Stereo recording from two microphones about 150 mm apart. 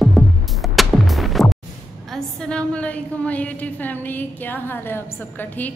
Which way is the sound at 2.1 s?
5° left (ahead or behind).